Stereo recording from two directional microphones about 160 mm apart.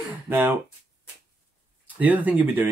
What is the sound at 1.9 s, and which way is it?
Speech, 10° right (ahead or behind).